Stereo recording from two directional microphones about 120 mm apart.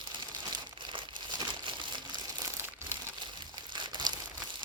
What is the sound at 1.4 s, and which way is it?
Crumpling, 40° right (ahead or behind).